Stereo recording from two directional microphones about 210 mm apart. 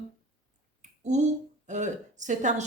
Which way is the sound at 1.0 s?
35° right (ahead or behind).